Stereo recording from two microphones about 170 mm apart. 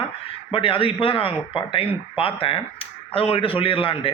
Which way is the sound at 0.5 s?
30° left (ahead or behind).